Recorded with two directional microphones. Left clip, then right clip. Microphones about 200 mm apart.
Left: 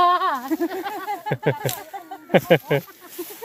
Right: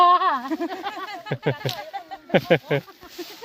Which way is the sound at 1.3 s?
5° left (ahead or behind).